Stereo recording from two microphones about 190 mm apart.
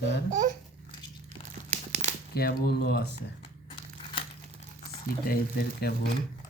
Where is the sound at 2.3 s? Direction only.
55° left (ahead or behind).